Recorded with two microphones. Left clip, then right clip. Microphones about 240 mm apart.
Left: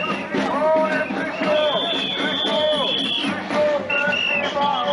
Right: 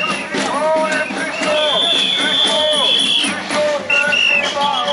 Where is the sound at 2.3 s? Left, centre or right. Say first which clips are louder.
Right 6 dB; centre.